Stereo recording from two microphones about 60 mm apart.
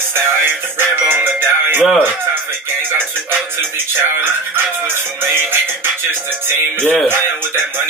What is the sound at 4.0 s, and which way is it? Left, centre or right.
Music, right.